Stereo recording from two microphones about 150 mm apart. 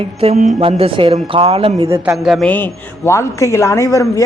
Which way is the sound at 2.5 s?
15° left (ahead or behind).